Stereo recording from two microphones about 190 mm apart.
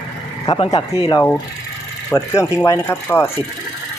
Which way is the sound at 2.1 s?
15° left (ahead or behind).